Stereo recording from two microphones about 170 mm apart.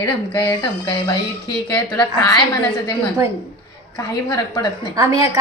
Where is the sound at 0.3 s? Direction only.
30° left (ahead or behind).